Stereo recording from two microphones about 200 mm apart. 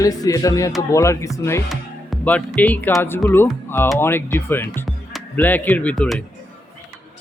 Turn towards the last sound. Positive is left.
turn(degrees=5)  # may be behind; listen again after turning